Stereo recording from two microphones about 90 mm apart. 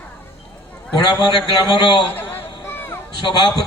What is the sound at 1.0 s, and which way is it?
Speech, 55° left (ahead or behind).